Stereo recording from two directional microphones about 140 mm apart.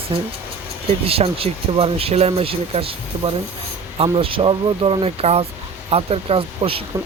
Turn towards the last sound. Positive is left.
turn(degrees=-40)  # may be behind; listen again after turning